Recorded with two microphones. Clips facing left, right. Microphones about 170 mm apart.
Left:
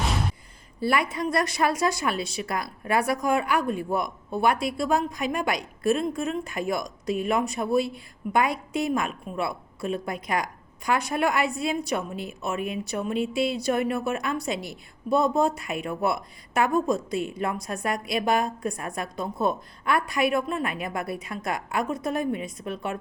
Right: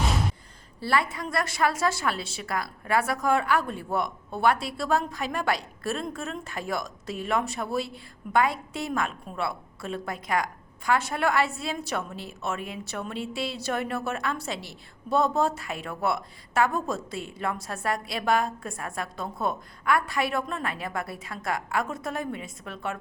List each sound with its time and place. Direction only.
0.8 s a woman's voice: 15° left (ahead or behind)